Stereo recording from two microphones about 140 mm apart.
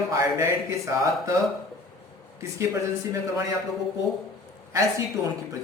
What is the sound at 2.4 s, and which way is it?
A man's voice, 20° right (ahead or behind).